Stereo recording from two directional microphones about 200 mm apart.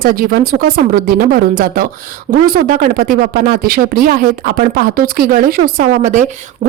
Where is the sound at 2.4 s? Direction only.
45° right (ahead or behind).